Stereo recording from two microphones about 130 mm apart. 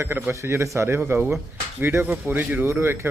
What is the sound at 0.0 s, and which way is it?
A man's voice, 15° right (ahead or behind).